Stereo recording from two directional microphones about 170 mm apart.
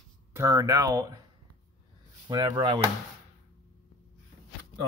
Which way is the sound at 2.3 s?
25° right (ahead or behind).